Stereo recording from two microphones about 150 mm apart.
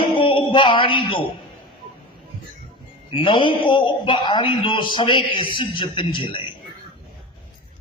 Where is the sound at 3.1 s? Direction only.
35° left (ahead or behind).